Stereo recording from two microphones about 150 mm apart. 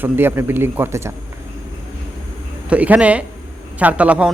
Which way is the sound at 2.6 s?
10° right (ahead or behind).